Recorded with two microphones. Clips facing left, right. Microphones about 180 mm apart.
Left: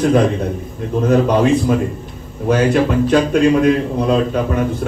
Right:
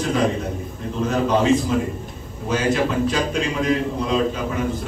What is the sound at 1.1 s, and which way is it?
Speech, 60° left (ahead or behind).